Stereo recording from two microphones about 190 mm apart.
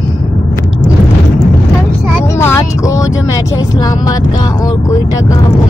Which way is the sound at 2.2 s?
15° left (ahead or behind).